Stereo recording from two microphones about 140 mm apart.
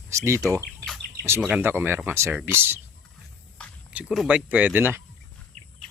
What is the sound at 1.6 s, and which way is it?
Speech, 15° right (ahead or behind).